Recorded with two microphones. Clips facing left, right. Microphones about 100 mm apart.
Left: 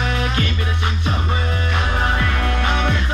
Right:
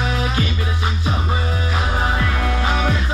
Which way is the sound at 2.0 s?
5° right (ahead or behind).